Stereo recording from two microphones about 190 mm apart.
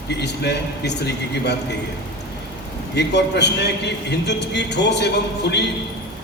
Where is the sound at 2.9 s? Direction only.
65° left (ahead or behind).